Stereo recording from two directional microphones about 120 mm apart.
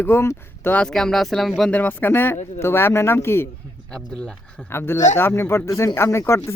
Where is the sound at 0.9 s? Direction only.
5° left (ahead or behind).